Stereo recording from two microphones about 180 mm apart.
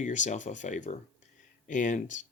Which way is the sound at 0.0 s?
40° left (ahead or behind).